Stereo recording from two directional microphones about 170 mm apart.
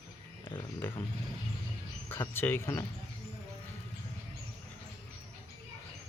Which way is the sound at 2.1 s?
10° left (ahead or behind).